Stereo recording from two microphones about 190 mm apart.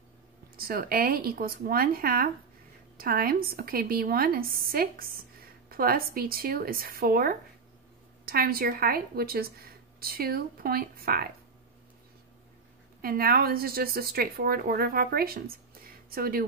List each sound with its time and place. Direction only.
0.6 s a woman's voice: 50° right (ahead or behind)
13.0 s a woman's voice: 50° right (ahead or behind)